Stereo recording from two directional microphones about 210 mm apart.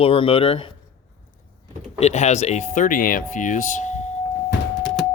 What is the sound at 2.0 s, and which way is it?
Speech, 35° left (ahead or behind).